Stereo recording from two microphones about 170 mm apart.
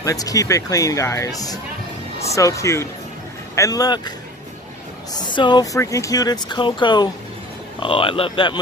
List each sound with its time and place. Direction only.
0.0 s speech: 20° left (ahead or behind)
5.1 s speech: 25° left (ahead or behind)